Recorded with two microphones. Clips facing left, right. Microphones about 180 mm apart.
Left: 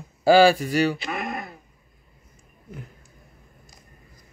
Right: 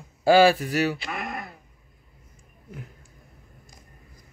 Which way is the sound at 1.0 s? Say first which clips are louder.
Left 3 dB; 20° left (ahead or behind).